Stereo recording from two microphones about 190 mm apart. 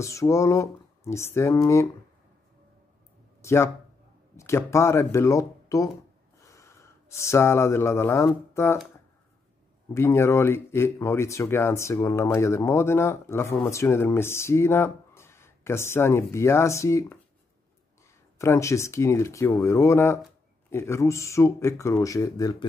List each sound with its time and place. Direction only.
0.0 s speech: 15° left (ahead or behind)
3.4 s speech: 15° left (ahead or behind)
9.9 s speech: 15° left (ahead or behind)
18.4 s speech: 15° left (ahead or behind)